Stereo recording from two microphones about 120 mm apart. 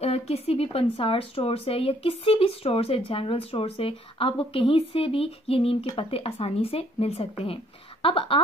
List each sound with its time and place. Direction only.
0.0 s a woman's voice: 60° left (ahead or behind)